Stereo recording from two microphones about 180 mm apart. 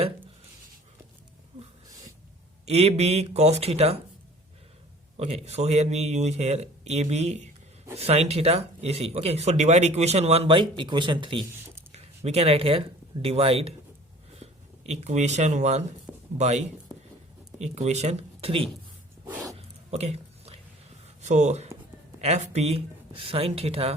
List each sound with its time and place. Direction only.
1.9 s a sound: 20° right (ahead or behind)
2.6 s speech: 35° right (ahead or behind)
5.1 s speech: 35° right (ahead or behind)
14.8 s speech: 40° right (ahead or behind)
16.1 s a sound: 10° right (ahead or behind)
16.4 s speech: 40° right (ahead or behind)
19.2 s dog: 10° right (ahead or behind)
19.5 s a sound: 35° right (ahead or behind)
21.2 s speech: 40° right (ahead or behind)